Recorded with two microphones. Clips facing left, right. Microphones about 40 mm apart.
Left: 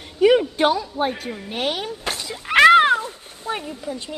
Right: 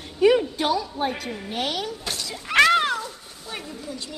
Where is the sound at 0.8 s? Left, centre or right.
Left.